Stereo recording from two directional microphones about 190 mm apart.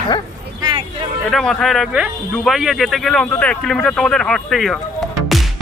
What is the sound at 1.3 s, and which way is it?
A man's voice, centre (ahead or behind).